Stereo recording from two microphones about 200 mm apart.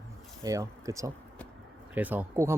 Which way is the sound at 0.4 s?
15° right (ahead or behind).